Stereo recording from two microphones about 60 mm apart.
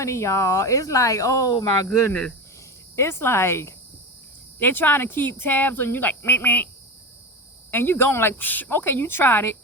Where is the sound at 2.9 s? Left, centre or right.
Left.